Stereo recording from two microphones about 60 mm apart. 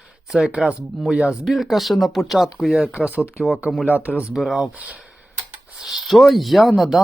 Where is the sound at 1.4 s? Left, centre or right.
Centre.